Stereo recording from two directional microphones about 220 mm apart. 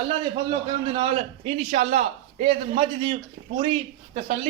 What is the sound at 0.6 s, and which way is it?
A man's voice, 20° right (ahead or behind).